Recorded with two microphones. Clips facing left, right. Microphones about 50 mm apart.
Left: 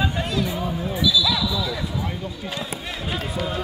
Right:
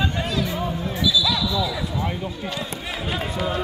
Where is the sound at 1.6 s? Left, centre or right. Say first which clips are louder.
Right 2 dB; centre.